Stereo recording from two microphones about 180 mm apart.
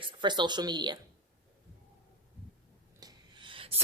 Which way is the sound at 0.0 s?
25° right (ahead or behind).